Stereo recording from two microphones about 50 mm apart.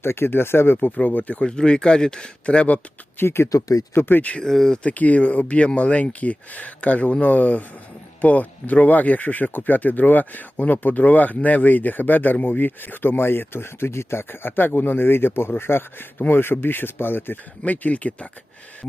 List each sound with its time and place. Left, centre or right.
0.0 s speech: left
0.8 s speech: left
1.5 s speech: centre
3.2 s speech: left
4.4 s speech: centre
4.8 s speech: left
17.6 s speech: left